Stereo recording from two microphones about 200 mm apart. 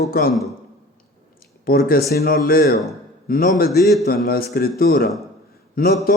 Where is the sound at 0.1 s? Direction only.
50° left (ahead or behind).